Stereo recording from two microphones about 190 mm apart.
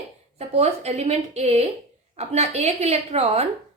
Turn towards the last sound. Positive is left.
turn(degrees=-30)  # may be behind; listen again after turning